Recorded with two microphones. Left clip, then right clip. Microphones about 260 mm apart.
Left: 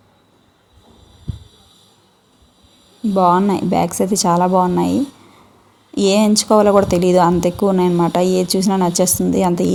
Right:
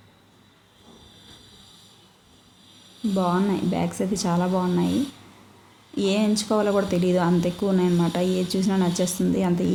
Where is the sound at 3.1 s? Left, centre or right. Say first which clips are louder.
Left 11 dB; left.